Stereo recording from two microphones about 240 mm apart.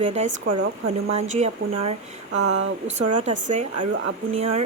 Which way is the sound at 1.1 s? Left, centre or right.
Right.